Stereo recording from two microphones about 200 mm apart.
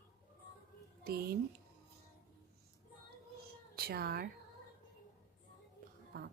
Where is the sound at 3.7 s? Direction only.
50° right (ahead or behind).